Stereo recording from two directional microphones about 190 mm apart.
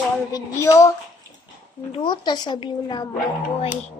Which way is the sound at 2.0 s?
25° left (ahead or behind).